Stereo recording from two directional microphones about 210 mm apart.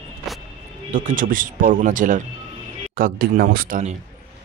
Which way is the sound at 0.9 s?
40° right (ahead or behind).